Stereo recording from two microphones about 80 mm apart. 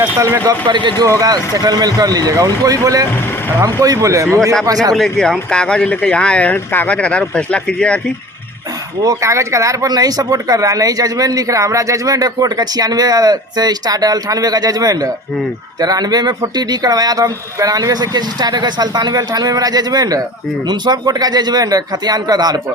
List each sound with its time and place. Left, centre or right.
0.7 s speech: right
1.0 s speech: right
4.6 s speech: right
4.9 s speech: centre
9.0 s speech: right